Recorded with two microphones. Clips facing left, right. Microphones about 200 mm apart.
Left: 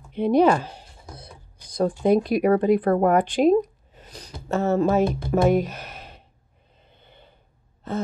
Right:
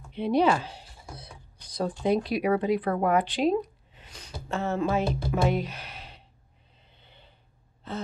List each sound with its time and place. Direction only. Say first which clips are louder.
0.1 s speech: left 5 dB; 50° left (ahead or behind)
6.9 s snort: left 5 dB; 50° left (ahead or behind)
7.9 s gasp: left 7 dB; 45° left (ahead or behind)